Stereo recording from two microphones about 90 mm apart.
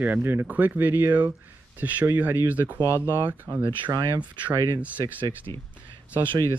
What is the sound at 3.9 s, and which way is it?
Speech, 45° right (ahead or behind).